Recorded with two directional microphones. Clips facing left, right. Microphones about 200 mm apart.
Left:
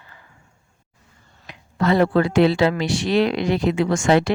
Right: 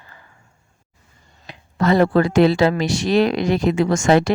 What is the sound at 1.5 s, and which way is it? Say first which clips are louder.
Speech: right 2 dB; 40° right (ahead or behind).